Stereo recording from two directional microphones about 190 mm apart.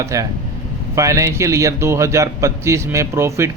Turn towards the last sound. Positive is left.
turn(degrees=-15)  # may be behind; listen again after turning